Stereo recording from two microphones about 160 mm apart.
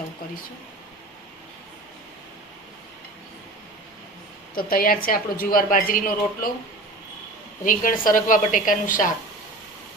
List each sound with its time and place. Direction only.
4.5 s a woman's voice: 65° left (ahead or behind)
7.6 s a woman's voice: 60° left (ahead or behind)